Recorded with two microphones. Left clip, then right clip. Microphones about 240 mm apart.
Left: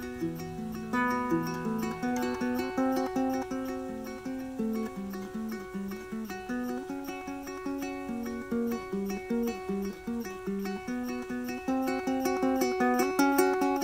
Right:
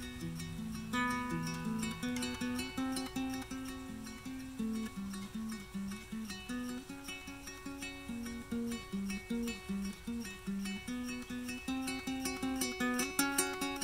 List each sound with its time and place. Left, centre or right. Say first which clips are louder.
0.9 s music: left 8 dB; left
8.6 s music: left 9 dB; left
10.6 s music: left 7 dB; left